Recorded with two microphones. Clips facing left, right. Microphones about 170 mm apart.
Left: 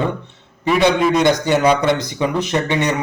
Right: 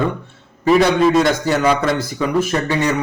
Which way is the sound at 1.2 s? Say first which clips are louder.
Left 1 dB; 20° left (ahead or behind).